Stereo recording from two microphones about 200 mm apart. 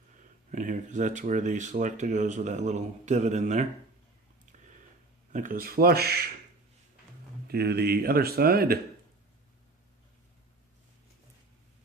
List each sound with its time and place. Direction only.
0.2 s speech: 40° right (ahead or behind)
5.3 s speech: 40° right (ahead or behind)
7.4 s speech: 50° right (ahead or behind)